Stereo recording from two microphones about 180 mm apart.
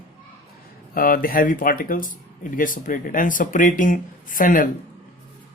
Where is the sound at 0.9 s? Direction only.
55° left (ahead or behind).